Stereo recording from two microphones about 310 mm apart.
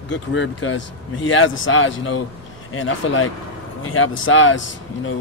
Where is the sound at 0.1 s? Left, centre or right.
Left.